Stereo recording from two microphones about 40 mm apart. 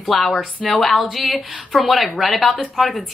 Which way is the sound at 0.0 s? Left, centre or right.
Centre.